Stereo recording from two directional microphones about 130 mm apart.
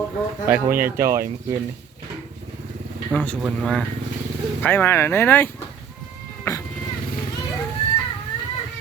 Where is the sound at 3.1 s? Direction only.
10° left (ahead or behind).